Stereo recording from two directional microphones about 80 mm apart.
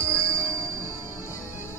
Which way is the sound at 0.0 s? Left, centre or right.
Right.